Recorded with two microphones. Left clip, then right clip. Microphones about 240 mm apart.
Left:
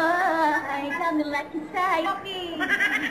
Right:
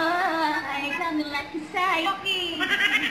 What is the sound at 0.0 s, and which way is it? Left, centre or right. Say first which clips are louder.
Music: left 2 dB; centre.